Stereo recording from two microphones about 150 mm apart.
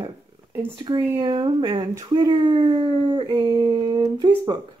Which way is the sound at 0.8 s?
30° right (ahead or behind).